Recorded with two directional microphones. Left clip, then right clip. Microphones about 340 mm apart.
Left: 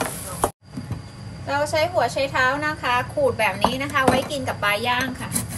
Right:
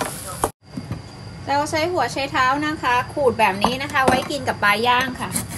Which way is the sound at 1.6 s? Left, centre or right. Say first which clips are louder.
Left 5 dB; right.